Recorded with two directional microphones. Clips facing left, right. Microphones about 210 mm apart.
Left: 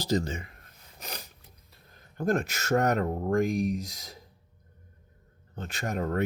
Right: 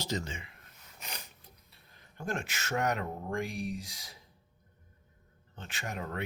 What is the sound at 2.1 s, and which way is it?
Speech, 40° left (ahead or behind).